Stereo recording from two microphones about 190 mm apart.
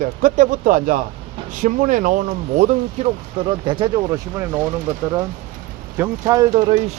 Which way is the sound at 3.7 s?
25° right (ahead or behind).